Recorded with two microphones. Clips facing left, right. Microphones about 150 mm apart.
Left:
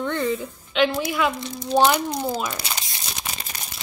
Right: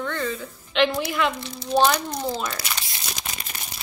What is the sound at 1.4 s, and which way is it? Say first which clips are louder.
A woman's voice: left 1 dB; 15° left (ahead or behind).